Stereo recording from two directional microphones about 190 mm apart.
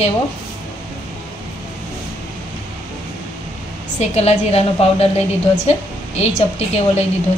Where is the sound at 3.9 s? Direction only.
35° left (ahead or behind).